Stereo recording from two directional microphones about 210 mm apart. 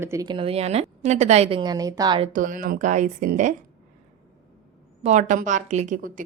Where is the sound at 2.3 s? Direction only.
40° right (ahead or behind).